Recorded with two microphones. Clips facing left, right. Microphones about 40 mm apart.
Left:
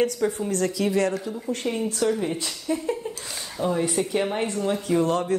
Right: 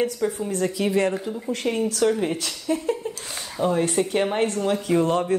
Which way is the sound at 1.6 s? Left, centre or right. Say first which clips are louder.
Right 3 dB; centre.